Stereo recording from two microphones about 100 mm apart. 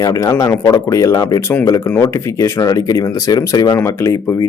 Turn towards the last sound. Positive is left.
turn(degrees=30)  # may be behind; listen again after turning